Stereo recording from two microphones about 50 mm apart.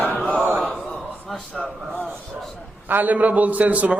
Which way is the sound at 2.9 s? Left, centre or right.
Right.